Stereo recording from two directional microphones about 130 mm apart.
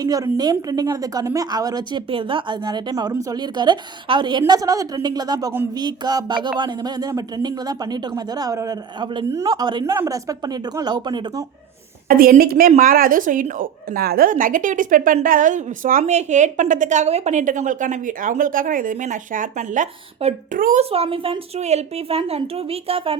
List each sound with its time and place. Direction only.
0.0 s speech: 30° right (ahead or behind)
2.0 s speech: 45° right (ahead or behind)
12.0 s a woman's voice: 90° right
20.9 s a woman's voice: 45° right (ahead or behind)